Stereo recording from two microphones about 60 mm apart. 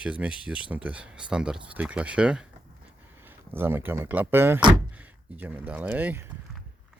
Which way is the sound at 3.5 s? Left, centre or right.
Right.